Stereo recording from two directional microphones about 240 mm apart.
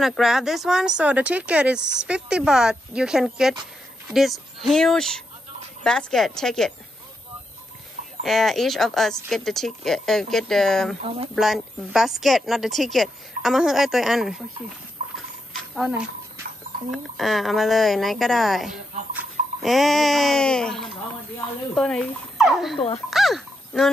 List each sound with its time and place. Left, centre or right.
0.0 s speech: centre
8.2 s speech: centre
11.0 s speech: right
11.3 s speech: centre
15.5 s a sound: centre
16.9 s speech: centre